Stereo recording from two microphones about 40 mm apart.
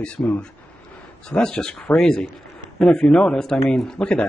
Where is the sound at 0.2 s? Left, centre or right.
Left.